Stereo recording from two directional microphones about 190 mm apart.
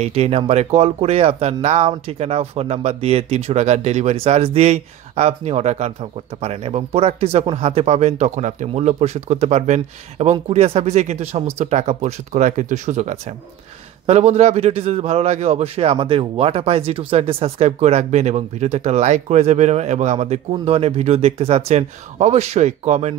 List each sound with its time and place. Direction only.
0.0 s a man's voice: 30° right (ahead or behind)